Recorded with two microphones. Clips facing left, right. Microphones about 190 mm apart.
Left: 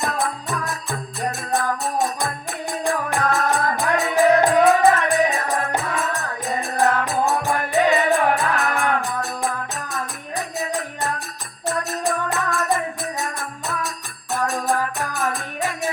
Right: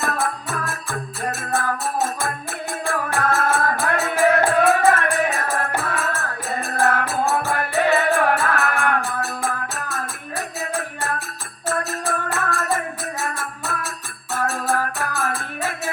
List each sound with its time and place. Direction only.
0.7 s music: 15° left (ahead or behind)
2.8 s music: 15° left (ahead or behind)
14.3 s music: 15° left (ahead or behind)